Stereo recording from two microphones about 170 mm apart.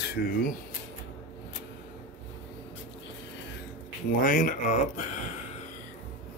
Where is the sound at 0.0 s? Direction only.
60° left (ahead or behind).